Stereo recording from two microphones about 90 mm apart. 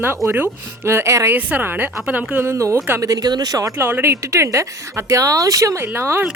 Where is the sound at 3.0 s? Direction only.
45° right (ahead or behind).